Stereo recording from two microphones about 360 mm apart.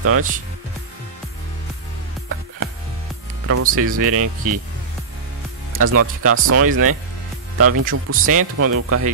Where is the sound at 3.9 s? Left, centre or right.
Right.